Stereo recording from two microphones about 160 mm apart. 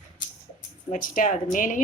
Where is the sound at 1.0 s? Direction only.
55° left (ahead or behind).